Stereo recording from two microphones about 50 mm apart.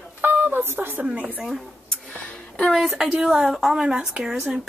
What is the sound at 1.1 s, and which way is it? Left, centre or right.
Speech, right.